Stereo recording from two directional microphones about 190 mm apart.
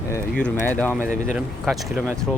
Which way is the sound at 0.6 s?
10° left (ahead or behind).